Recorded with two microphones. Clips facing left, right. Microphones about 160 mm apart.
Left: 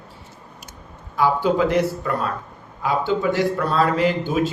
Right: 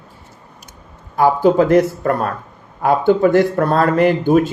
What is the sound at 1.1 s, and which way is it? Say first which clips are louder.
A man's voice: right 6 dB; 50° right (ahead or behind).